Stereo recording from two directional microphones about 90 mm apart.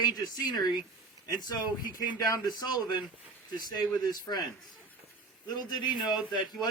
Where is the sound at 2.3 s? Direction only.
50° left (ahead or behind).